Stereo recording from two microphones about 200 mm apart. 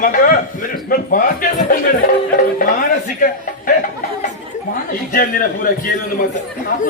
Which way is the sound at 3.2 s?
45° left (ahead or behind).